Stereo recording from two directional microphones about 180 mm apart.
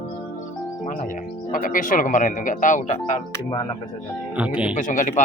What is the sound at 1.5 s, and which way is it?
Speech, 50° left (ahead or behind).